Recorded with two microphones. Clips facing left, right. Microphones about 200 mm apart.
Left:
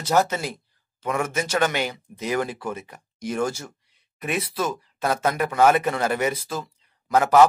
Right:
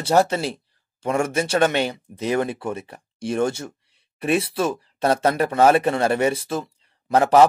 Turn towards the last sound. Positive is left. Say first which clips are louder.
# right 1 dB
turn(degrees=-30)  # may be behind; listen again after turning